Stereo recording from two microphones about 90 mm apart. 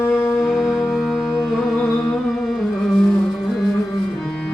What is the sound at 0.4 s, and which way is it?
Music, centre (ahead or behind).